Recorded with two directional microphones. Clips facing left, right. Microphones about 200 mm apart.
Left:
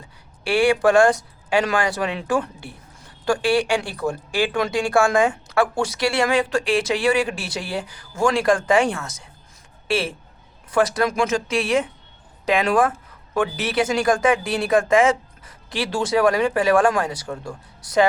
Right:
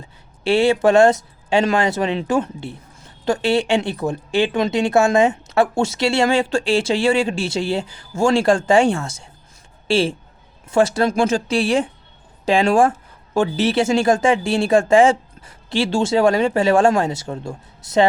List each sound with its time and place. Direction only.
0.4 s a woman's voice: 25° right (ahead or behind)